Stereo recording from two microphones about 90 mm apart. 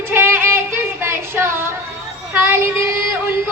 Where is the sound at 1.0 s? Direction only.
25° right (ahead or behind).